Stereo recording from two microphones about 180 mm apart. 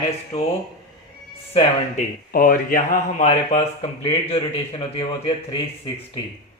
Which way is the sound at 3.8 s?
25° left (ahead or behind).